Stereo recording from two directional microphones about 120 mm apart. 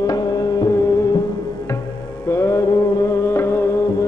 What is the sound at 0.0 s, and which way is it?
Music, 35° left (ahead or behind).